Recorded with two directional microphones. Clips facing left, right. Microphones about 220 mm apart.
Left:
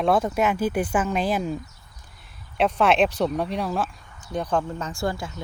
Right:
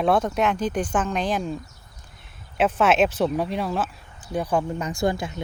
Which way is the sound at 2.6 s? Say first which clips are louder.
Even; centre (ahead or behind).